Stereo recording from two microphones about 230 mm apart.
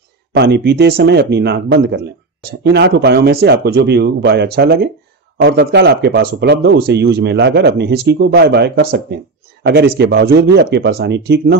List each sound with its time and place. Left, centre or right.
0.3 s speech: right